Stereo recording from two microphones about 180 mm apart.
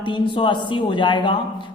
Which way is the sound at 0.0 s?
25° left (ahead or behind).